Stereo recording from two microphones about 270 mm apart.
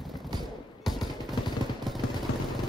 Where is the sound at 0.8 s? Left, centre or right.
Centre.